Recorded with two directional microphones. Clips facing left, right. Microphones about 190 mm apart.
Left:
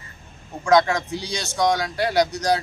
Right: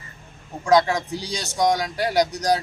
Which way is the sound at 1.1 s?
35° right (ahead or behind).